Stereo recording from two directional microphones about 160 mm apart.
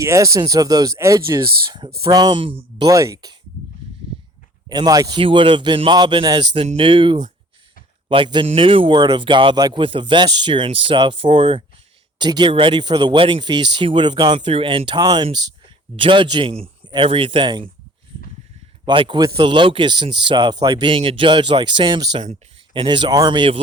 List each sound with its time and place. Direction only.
0.0 s speech: 20° right (ahead or behind)
1.5 s a man's voice: 30° right (ahead or behind)
2.8 s speech: 20° right (ahead or behind)
4.7 s a man's voice: 25° right (ahead or behind)
18.9 s speech: 30° right (ahead or behind)